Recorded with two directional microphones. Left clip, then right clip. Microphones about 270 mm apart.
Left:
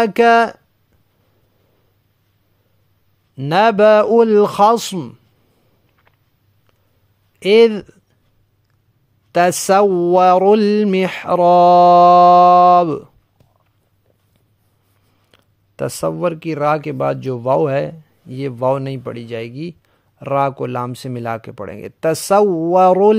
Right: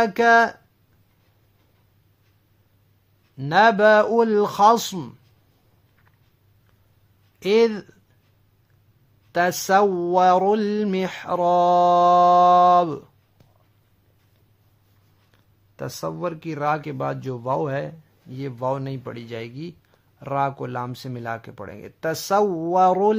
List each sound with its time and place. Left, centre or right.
0.0 s speech: left
3.3 s speech: left
7.3 s speech: left
9.3 s speech: left
15.3 s speech: left